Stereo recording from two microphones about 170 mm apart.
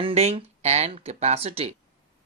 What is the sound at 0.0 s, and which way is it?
Speech, 35° right (ahead or behind).